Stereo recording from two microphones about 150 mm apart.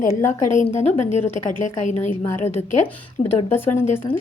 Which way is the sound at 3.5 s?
15° left (ahead or behind).